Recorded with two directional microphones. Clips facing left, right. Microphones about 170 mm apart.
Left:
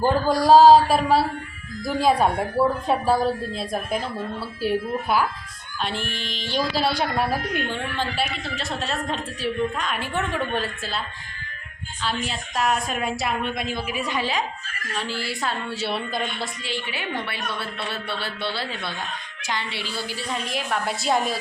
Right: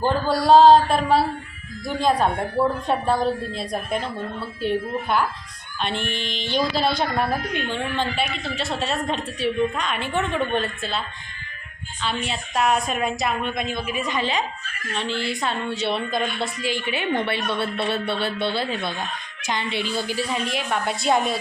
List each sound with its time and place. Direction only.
0.0 s a woman's voice: 10° left (ahead or behind)
12.0 s a woman's voice: centre (ahead or behind)
16.6 s speech: 15° right (ahead or behind)
20.3 s a woman's voice: centre (ahead or behind)